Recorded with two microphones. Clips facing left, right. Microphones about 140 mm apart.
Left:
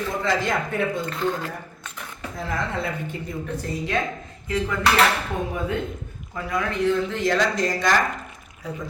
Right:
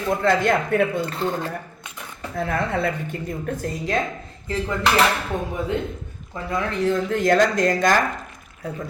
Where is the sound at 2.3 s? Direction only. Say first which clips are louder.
Right 4 dB; 60° right (ahead or behind).